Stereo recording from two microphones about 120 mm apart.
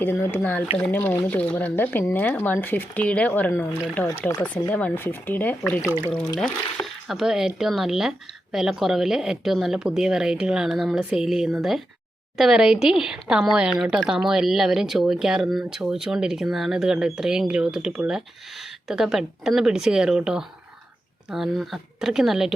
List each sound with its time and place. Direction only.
0.0 s speech: 15° left (ahead or behind); by 22.5 s 5° right (ahead or behind)